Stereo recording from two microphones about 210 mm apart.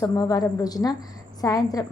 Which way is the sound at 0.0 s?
15° left (ahead or behind).